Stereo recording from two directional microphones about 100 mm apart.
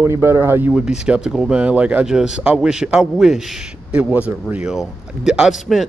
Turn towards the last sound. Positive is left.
turn(degrees=0)  # may be behind; listen again after turning